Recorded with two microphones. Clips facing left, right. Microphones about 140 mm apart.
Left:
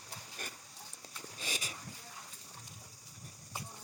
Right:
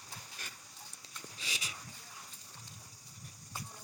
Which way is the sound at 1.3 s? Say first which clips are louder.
Left 4 dB; 45° left (ahead or behind).